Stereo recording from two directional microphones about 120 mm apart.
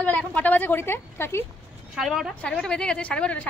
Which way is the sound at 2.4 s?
10° left (ahead or behind).